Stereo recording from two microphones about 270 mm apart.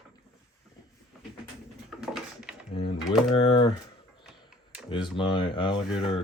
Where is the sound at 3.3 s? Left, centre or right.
Centre.